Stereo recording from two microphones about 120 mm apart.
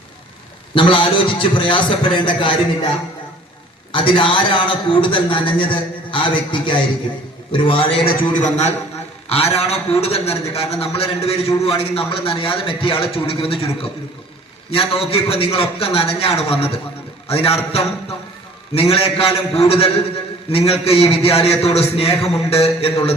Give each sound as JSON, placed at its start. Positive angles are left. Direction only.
{"t": 0.7, "sound": "a man's voice", "side_deg": 45}
{"t": 3.9, "sound": "a man's voice", "side_deg": 45}
{"t": 8.4, "sound": "a man's voice", "side_deg": 75}
{"t": 9.3, "sound": "a man's voice", "side_deg": 55}
{"t": 14.7, "sound": "a man's voice", "side_deg": 50}
{"t": 18.7, "sound": "a man's voice", "side_deg": 55}